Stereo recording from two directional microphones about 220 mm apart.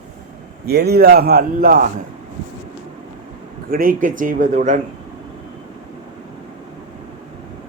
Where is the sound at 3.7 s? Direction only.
40° right (ahead or behind).